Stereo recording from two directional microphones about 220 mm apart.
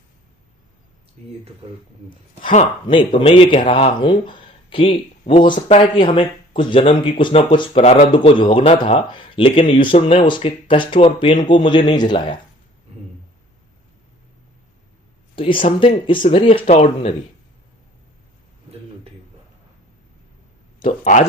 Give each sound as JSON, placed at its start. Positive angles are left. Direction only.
{"t": 2.4, "sound": "a man's voice", "side_deg": 30}
{"t": 15.4, "sound": "a man's voice", "side_deg": 25}
{"t": 20.8, "sound": "speech", "side_deg": 30}